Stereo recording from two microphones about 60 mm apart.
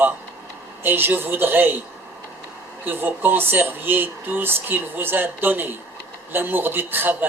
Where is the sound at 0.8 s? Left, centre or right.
Right.